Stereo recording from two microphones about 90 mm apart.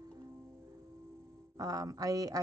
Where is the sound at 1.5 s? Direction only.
40° right (ahead or behind).